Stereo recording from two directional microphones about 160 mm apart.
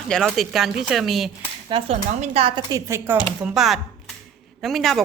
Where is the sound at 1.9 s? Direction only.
40° right (ahead or behind).